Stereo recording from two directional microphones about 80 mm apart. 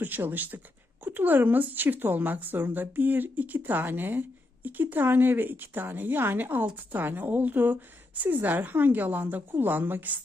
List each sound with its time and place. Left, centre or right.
0.0 s speech: right